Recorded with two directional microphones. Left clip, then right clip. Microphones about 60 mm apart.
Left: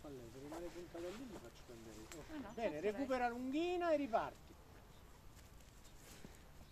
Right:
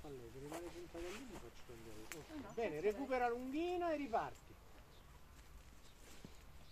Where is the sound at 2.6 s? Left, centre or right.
Left.